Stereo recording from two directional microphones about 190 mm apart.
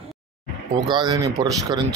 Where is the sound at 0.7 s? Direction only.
25° right (ahead or behind).